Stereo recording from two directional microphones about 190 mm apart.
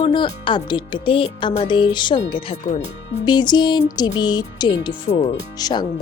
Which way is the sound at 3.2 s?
25° left (ahead or behind).